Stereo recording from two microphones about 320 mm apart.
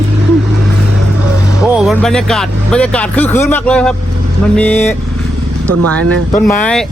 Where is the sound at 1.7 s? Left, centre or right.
Centre.